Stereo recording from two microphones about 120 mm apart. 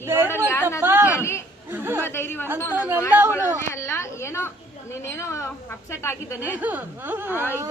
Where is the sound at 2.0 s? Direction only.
20° left (ahead or behind).